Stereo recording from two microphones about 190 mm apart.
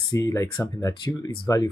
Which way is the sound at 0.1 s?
15° left (ahead or behind).